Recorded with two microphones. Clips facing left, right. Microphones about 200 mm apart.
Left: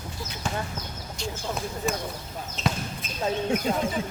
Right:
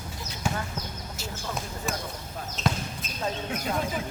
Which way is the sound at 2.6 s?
Centre (ahead or behind).